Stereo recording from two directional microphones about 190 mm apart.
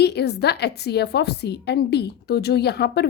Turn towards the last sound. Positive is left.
turn(degrees=60)  # may be behind; listen again after turning